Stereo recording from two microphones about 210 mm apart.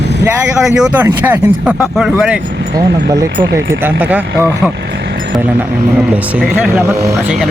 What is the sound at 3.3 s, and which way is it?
Speech, 55° right (ahead or behind).